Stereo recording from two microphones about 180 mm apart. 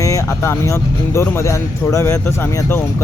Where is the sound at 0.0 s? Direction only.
15° left (ahead or behind).